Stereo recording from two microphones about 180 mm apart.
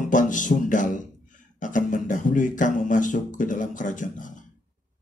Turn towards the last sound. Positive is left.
turn(degrees=45)  # may be behind; listen again after turning